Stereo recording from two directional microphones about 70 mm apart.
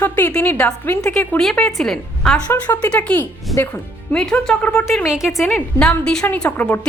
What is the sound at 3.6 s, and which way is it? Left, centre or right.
Speech, left.